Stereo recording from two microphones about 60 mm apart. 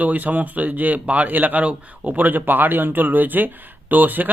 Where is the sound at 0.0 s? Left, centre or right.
Right.